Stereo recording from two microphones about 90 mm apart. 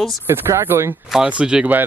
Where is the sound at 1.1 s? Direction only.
10° right (ahead or behind).